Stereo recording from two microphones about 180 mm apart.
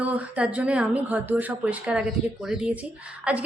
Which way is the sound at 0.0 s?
10° right (ahead or behind).